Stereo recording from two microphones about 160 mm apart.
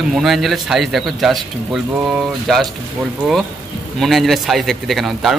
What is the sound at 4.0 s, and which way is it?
A man's voice, centre (ahead or behind).